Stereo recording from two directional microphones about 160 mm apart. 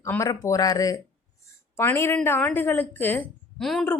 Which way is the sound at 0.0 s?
20° left (ahead or behind).